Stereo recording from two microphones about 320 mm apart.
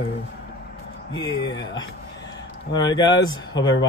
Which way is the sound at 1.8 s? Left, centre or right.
Left.